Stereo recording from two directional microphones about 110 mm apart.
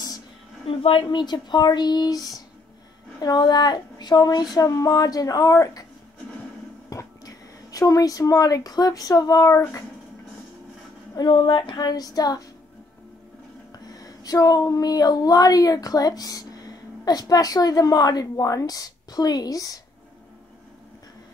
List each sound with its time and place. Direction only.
0.7 s speech: 55° left (ahead or behind); by 5.9 s 30° left (ahead or behind)
6.9 s speech: 30° left (ahead or behind)
11.1 s speech: 45° left (ahead or behind)
13.8 s speech: 35° left (ahead or behind)